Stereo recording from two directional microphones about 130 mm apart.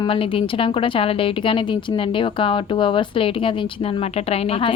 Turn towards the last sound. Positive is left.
turn(degrees=45)  # may be behind; listen again after turning